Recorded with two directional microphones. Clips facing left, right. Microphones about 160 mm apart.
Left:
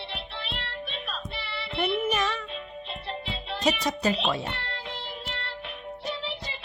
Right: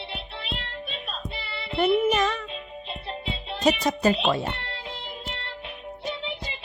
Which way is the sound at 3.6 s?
45° right (ahead or behind).